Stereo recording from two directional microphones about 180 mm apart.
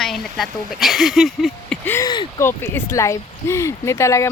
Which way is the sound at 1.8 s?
15° left (ahead or behind).